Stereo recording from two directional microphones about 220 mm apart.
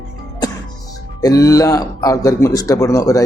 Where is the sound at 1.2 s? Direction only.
15° left (ahead or behind).